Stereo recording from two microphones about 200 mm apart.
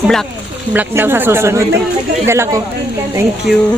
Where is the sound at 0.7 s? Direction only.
10° right (ahead or behind).